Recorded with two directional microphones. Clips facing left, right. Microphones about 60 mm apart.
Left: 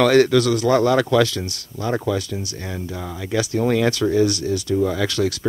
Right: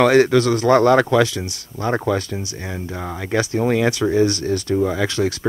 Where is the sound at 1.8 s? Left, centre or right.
Right.